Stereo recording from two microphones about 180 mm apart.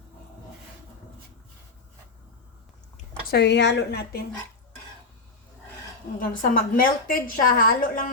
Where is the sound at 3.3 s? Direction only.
70° left (ahead or behind).